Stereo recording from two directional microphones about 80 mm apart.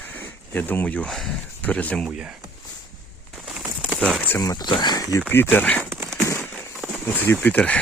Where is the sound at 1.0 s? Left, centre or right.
Centre.